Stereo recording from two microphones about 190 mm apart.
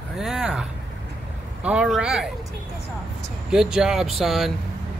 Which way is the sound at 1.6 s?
5° right (ahead or behind).